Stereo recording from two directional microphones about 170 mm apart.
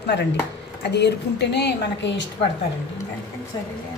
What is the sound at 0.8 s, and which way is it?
A woman's voice, 85° left.